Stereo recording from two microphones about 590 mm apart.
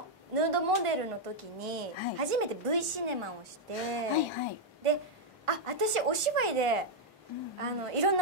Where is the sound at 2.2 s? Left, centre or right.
Right.